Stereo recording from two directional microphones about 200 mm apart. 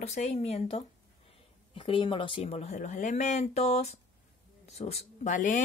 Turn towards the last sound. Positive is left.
turn(degrees=40)  # may be behind; listen again after turning